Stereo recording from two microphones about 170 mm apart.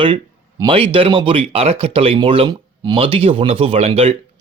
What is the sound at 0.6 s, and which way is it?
Speech, 30° right (ahead or behind).